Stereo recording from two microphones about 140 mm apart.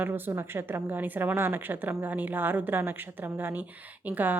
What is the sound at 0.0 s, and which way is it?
A woman's voice, 15° right (ahead or behind).